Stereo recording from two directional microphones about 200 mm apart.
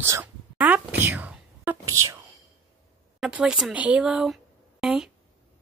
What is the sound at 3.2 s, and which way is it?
Speech, 5° right (ahead or behind).